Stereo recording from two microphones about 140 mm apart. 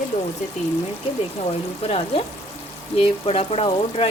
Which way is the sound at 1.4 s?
50° left (ahead or behind).